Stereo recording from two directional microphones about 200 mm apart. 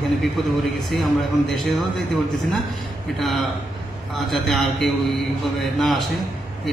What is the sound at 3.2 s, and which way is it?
A man's voice, centre (ahead or behind).